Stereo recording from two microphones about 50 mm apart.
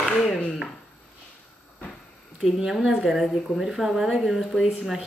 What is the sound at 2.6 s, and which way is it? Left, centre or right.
Speech, centre.